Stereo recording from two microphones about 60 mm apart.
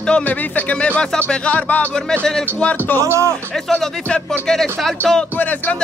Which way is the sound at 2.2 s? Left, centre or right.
Centre.